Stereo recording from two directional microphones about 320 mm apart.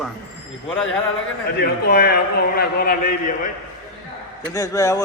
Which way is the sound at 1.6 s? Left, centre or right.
Left.